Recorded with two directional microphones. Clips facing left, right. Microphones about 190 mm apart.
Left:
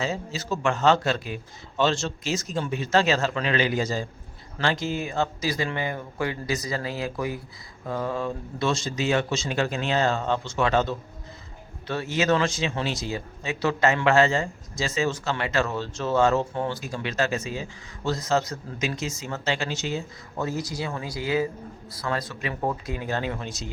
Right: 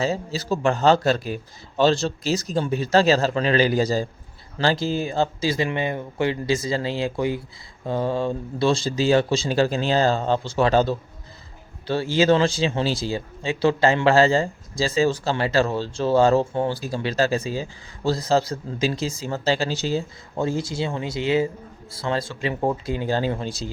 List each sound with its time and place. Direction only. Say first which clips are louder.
0.0 s a man's voice: right 5 dB; 35° right (ahead or behind)